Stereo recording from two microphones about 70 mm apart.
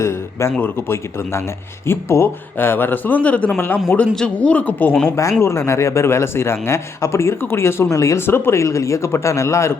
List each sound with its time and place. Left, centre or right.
0.0 s a man's voice: left
5.4 s speech: left